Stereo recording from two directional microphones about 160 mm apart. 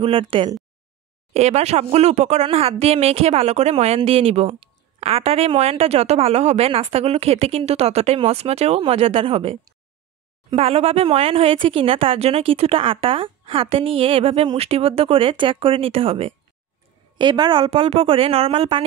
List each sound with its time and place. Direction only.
0.0 s speech: 35° right (ahead or behind)
1.3 s speech: 45° right (ahead or behind)